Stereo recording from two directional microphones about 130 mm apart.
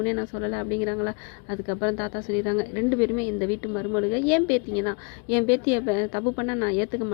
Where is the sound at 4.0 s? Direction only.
15° left (ahead or behind).